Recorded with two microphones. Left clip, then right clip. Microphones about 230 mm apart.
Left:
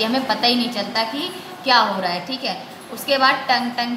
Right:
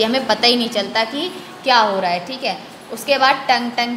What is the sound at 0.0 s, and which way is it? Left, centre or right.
A woman's voice, right.